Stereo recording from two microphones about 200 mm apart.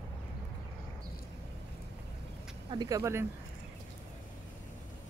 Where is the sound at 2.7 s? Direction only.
20° right (ahead or behind).